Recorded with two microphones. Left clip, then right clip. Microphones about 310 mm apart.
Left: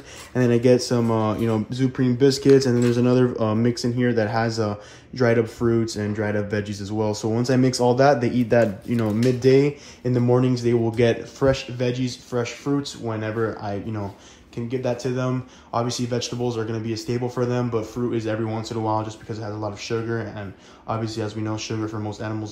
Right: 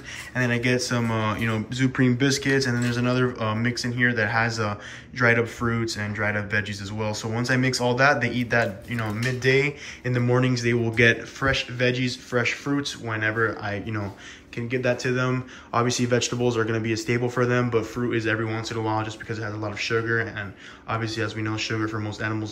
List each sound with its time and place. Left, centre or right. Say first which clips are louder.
0.4 s speech: left 6 dB; left